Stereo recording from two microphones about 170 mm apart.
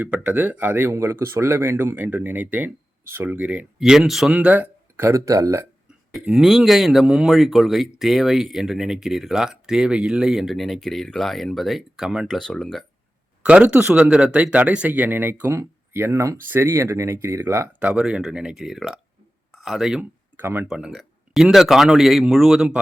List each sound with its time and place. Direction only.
0.0 s speech: 10° right (ahead or behind)
6.1 s speech: 5° right (ahead or behind)